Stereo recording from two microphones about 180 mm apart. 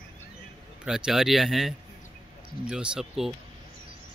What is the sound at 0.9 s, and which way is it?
Speech, 5° right (ahead or behind).